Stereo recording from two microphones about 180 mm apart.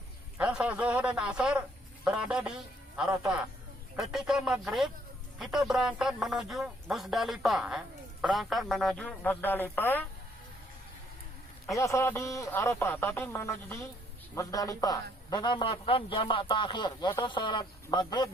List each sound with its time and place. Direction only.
0.3 s a man's voice: 5° right (ahead or behind)
3.9 s speech: centre (ahead or behind)
11.8 s a man's voice: 15° left (ahead or behind)